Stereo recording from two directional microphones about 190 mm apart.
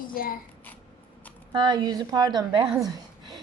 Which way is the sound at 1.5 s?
25° right (ahead or behind).